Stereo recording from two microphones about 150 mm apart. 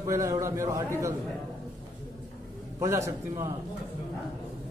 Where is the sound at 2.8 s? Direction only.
20° right (ahead or behind).